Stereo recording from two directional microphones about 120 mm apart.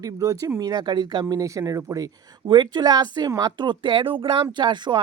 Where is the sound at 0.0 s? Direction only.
30° right (ahead or behind).